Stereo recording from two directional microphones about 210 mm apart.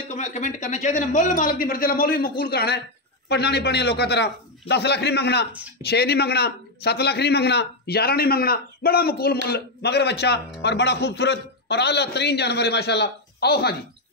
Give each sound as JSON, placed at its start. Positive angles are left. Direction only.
{"t": 0.1, "sound": "a man's voice", "side_deg": 35}